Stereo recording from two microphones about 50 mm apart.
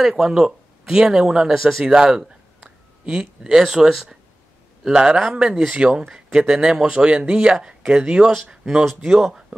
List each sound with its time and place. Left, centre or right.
0.0 s speech: centre
1.5 s speech: centre
1.9 s speech: centre
8.8 s speech: centre